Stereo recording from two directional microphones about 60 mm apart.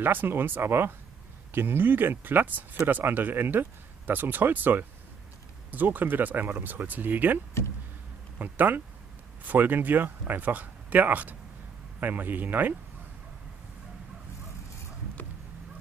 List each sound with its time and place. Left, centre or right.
0.0 s speech: right
8.4 s speech: right